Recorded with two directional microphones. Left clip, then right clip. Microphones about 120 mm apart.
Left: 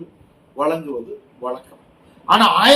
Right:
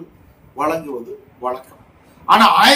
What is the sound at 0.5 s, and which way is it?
A man's voice, 15° right (ahead or behind).